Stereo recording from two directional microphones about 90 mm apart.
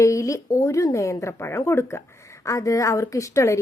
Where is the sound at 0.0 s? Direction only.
35° left (ahead or behind).